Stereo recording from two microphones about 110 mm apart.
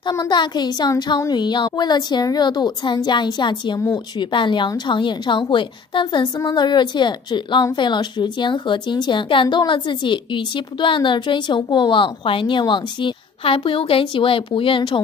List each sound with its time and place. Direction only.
0.1 s a woman's voice: 40° left (ahead or behind)